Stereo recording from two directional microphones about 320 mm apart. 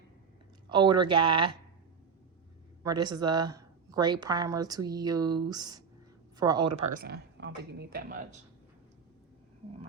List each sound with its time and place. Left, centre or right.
0.7 s speech: centre
2.8 s speech: centre
7.0 s speech: right